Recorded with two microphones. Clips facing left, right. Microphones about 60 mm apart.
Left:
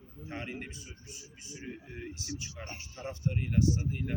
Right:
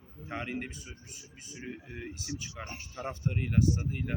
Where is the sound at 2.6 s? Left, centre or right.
Right.